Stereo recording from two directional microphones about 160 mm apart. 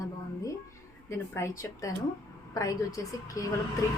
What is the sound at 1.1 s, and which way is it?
A woman's voice, 15° left (ahead or behind).